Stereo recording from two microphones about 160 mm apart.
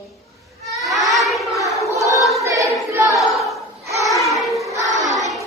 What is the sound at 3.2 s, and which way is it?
Choir, centre (ahead or behind).